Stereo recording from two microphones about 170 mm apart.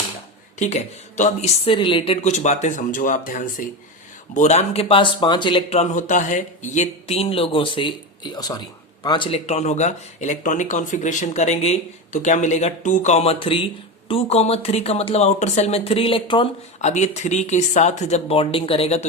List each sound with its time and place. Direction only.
0.6 s speech: 45° left (ahead or behind)
5.8 s speech: 45° left (ahead or behind)